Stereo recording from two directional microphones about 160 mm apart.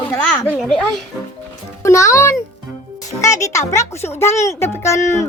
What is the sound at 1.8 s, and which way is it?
Speech, 20° left (ahead or behind).